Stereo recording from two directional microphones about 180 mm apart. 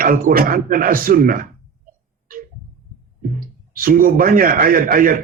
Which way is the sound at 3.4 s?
50° right (ahead or behind).